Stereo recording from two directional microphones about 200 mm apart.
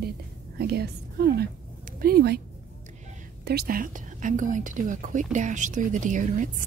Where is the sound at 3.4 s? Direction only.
50° right (ahead or behind).